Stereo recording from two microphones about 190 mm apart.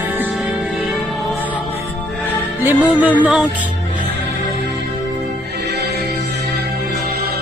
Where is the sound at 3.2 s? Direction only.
5° right (ahead or behind).